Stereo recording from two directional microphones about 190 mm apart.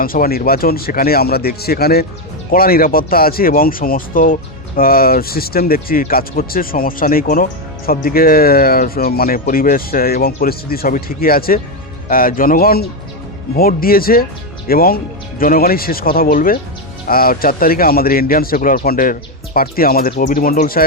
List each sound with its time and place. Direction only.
0.0 s speech: 50° left (ahead or behind)